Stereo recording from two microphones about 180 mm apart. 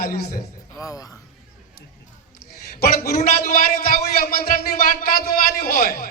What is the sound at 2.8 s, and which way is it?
Speech, 50° left (ahead or behind).